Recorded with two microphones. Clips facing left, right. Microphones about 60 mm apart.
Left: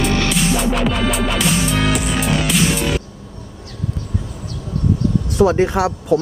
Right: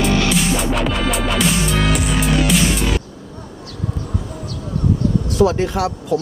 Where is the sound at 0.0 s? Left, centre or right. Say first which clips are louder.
Right 1 dB; centre.